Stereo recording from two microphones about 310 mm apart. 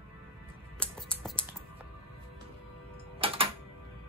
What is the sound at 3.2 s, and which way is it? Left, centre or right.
Music, centre.